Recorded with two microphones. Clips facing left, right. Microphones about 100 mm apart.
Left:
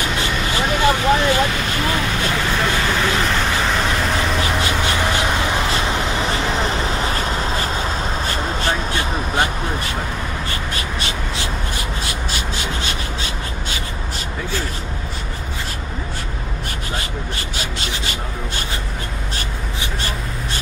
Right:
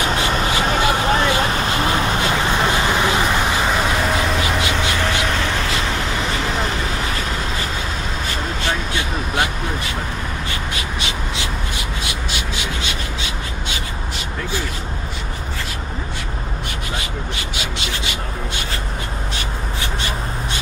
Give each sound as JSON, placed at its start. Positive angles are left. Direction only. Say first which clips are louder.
{"t": 0.1, "sound": "vehicle", "louder": "right 2 dB", "side_deg": -35}
{"t": 4.9, "sound": "vehicle", "louder": "left 1 dB", "side_deg": 15}
{"t": 8.6, "sound": "vehicle", "louder": "even", "side_deg": 40}
{"t": 10.7, "sound": "a sound", "louder": "even", "side_deg": 40}
{"t": 12.0, "sound": "rub", "louder": "left 1 dB", "side_deg": 40}
{"t": 17.6, "sound": "a sound", "louder": "even", "side_deg": 40}